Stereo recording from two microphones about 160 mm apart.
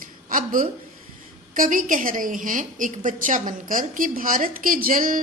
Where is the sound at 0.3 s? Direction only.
60° right (ahead or behind).